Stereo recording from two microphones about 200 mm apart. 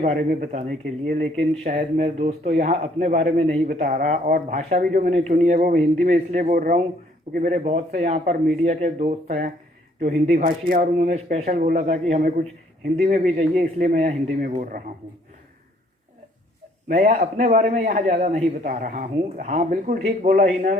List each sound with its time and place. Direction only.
0.0 s a man's voice: 40° right (ahead or behind)
16.9 s a man's voice: 35° right (ahead or behind)